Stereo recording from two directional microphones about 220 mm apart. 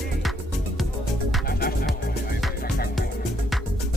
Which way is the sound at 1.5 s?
40° left (ahead or behind).